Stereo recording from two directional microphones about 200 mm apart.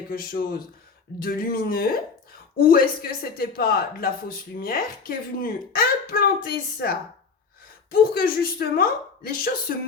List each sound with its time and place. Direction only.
0.1 s speech: 45° left (ahead or behind)